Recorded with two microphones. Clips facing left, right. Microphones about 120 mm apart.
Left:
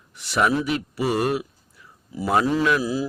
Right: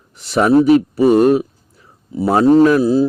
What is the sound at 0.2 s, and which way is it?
A man's voice, 30° right (ahead or behind).